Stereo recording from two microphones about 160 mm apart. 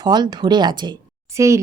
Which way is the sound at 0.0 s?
25° right (ahead or behind).